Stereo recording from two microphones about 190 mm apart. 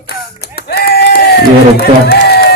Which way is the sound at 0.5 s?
55° left (ahead or behind).